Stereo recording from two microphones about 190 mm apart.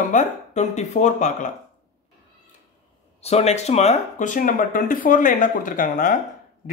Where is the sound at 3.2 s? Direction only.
35° left (ahead or behind).